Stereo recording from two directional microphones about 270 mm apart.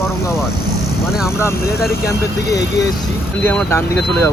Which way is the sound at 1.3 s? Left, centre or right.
Centre.